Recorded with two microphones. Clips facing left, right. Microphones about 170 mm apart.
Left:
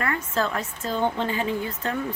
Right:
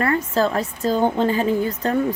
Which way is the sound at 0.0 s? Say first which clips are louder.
Right 7 dB; 35° right (ahead or behind).